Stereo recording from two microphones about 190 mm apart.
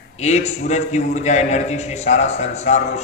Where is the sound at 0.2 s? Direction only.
35° left (ahead or behind).